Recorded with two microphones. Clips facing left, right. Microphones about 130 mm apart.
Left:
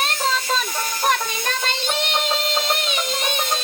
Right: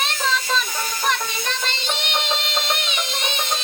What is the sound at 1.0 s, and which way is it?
Music, 50° left (ahead or behind).